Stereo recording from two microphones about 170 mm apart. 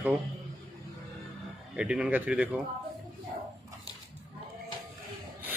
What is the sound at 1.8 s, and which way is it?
Speech, 5° right (ahead or behind).